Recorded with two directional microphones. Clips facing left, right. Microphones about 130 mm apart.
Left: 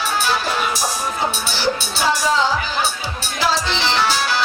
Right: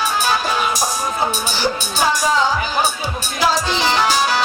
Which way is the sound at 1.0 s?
45° right (ahead or behind).